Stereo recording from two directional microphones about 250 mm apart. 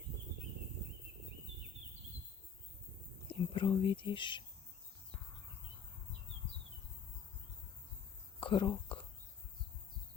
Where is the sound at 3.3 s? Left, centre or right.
Left.